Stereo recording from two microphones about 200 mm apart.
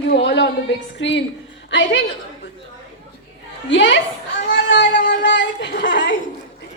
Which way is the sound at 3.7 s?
65° left (ahead or behind).